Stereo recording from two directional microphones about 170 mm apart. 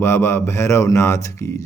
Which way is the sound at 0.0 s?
15° left (ahead or behind).